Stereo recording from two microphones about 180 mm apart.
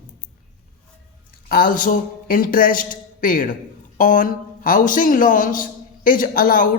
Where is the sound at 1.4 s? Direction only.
50° left (ahead or behind).